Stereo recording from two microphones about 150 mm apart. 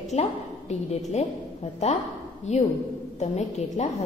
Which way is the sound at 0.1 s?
45° left (ahead or behind).